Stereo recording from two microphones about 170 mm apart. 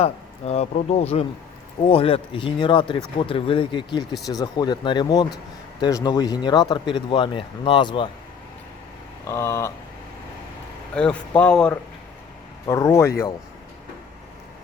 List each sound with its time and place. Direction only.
0.0 s a man's voice: 40° left (ahead or behind)
9.2 s speech: 15° left (ahead or behind)
10.9 s speech: 5° left (ahead or behind)
12.6 s speech: 15° left (ahead or behind)